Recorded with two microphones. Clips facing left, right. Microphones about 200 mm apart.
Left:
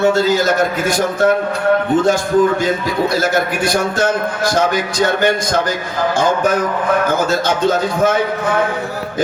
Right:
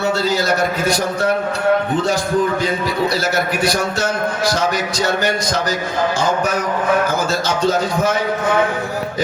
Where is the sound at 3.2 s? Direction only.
50° left (ahead or behind).